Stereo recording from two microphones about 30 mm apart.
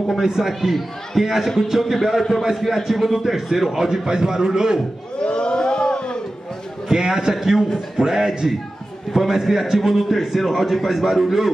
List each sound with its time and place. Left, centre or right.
0.2 s a man's voice: centre
0.5 s a man's voice: centre
5.2 s a sound: left
6.9 s a man's voice: right; by 11.5 s centre